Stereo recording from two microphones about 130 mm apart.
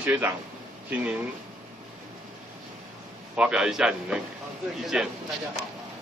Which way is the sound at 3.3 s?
5° right (ahead or behind).